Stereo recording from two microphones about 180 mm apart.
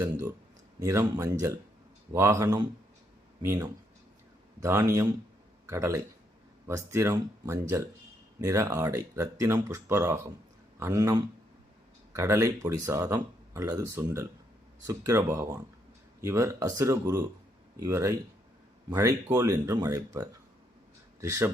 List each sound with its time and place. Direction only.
0.8 s speech: 20° right (ahead or behind)